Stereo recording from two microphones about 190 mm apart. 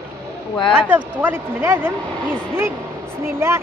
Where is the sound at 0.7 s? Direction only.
10° right (ahead or behind).